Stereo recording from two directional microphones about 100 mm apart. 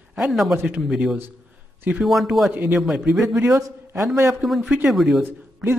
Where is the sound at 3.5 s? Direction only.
35° right (ahead or behind).